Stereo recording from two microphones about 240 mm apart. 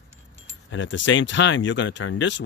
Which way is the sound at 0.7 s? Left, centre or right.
Left.